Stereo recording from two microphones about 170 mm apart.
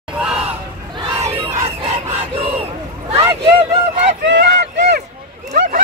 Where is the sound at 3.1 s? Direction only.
20° right (ahead or behind).